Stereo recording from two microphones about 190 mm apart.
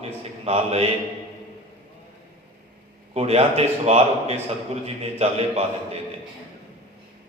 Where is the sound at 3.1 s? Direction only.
35° right (ahead or behind).